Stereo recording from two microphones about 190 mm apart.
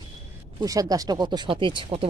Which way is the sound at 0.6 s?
20° right (ahead or behind).